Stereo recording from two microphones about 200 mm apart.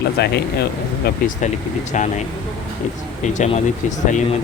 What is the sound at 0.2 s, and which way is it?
Speech, 55° left (ahead or behind).